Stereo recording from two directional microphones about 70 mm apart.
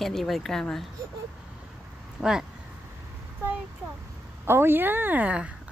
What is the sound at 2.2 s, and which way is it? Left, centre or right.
Speech, centre.